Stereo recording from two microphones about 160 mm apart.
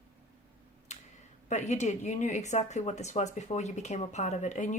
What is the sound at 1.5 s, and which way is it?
A woman's voice, 45° left (ahead or behind).